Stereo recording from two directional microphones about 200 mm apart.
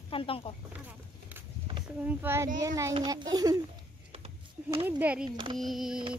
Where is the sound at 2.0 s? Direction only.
10° right (ahead or behind).